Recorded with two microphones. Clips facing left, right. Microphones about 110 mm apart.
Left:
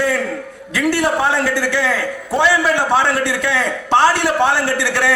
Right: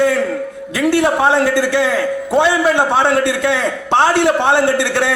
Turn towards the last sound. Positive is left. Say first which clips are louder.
# right 4 dB
turn(degrees=-20)  # may be behind; listen again after turning